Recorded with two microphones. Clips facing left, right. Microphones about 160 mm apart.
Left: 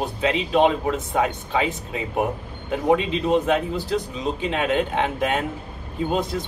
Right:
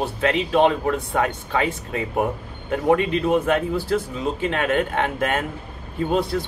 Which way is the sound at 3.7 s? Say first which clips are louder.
Right 2 dB; 15° left (ahead or behind).